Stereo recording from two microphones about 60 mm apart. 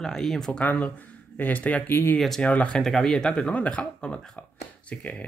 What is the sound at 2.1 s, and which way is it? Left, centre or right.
Speech, centre.